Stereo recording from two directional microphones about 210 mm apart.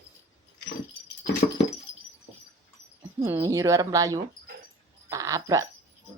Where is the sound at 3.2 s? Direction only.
15° right (ahead or behind).